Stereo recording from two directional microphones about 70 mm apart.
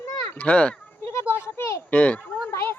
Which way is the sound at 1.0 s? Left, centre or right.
Left.